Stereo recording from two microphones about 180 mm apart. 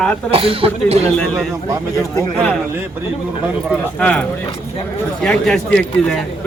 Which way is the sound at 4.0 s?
5° left (ahead or behind).